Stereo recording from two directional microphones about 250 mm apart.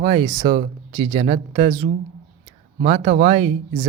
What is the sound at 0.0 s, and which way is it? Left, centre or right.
Speech, right.